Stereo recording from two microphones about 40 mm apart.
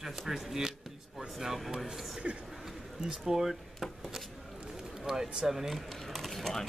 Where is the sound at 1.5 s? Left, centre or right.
Centre.